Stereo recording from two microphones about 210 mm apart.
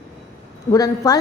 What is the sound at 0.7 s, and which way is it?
Speech, 15° left (ahead or behind).